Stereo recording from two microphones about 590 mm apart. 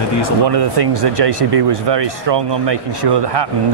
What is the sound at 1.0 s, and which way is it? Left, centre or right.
Speech, right.